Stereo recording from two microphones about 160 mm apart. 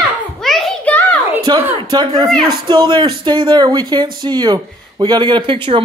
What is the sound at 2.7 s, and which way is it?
Speech, 30° right (ahead or behind).